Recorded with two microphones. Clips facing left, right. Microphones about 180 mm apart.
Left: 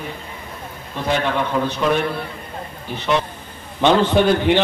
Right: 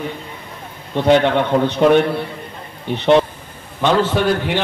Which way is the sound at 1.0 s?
70° right (ahead or behind).